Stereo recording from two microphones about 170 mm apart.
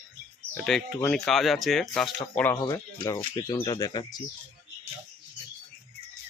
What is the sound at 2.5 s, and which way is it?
Speech, 30° left (ahead or behind).